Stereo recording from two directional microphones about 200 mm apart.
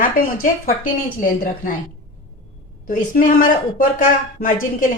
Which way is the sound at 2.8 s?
40° left (ahead or behind).